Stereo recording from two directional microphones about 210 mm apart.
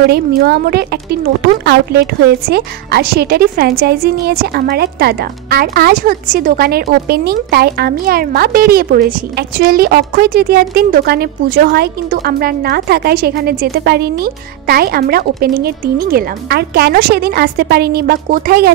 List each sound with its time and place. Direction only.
0.1 s speech: 50° right (ahead or behind)